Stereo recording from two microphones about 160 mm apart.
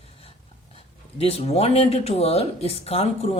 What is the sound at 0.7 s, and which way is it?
Speech, 40° left (ahead or behind).